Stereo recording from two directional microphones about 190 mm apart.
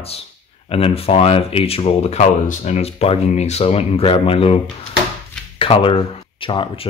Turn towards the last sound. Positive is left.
turn(degrees=30)  # may be behind; listen again after turning